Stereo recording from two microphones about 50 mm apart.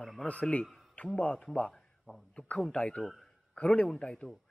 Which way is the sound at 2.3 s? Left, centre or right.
Left.